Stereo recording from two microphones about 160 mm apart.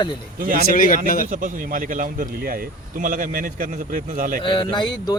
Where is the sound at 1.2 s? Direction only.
55° right (ahead or behind).